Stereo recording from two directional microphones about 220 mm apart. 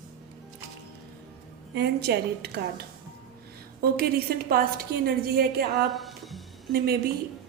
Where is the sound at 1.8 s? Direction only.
50° right (ahead or behind).